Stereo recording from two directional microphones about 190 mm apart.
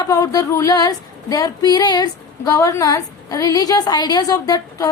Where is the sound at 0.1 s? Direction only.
20° left (ahead or behind).